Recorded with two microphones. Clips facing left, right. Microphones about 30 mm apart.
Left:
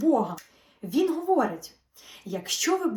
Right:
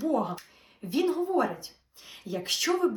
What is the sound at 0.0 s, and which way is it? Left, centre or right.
Speech, right.